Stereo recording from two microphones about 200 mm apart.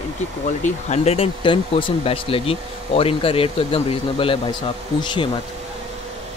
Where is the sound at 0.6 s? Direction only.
30° left (ahead or behind).